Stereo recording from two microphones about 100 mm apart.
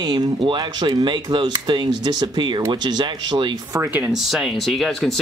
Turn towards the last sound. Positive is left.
turn(degrees=0)  # may be behind; listen again after turning